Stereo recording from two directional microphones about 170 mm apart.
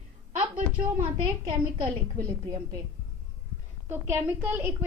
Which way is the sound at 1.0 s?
30° right (ahead or behind).